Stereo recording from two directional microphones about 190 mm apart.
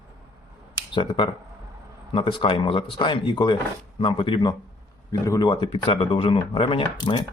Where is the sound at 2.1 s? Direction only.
25° left (ahead or behind).